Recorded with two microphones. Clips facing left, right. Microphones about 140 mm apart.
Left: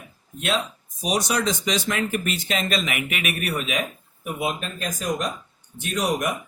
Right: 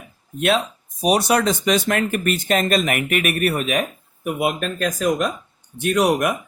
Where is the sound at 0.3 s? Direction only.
60° right (ahead or behind).